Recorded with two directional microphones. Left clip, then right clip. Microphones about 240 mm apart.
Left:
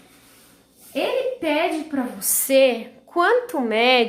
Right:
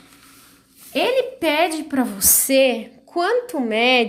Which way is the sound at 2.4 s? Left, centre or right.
Right.